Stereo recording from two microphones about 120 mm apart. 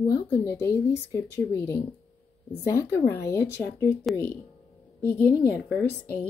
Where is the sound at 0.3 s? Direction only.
20° left (ahead or behind).